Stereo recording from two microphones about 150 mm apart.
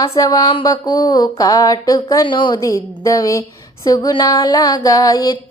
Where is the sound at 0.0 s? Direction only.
20° left (ahead or behind).